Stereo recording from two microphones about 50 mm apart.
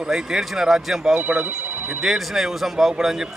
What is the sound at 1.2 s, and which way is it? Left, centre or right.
Speech, right.